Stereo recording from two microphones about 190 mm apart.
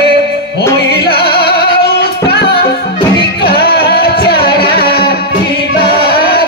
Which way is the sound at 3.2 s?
55° left (ahead or behind).